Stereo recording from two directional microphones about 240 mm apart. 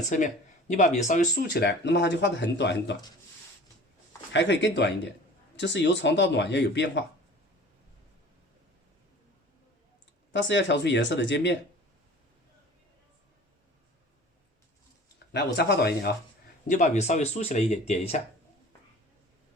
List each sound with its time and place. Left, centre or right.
0.1 s speech: left
4.3 s speech: left
10.3 s speech: left
15.5 s speech: left
16.6 s speech: left